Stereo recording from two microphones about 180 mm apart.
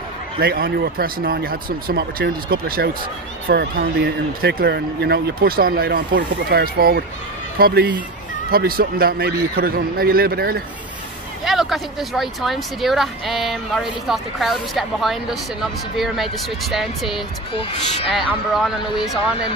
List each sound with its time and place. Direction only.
0.4 s speech: 60° right (ahead or behind)
8.5 s speech: 55° right (ahead or behind)
11.4 s speech: centre (ahead or behind)
17.5 s speech: 30° left (ahead or behind)
18.1 s speech: centre (ahead or behind)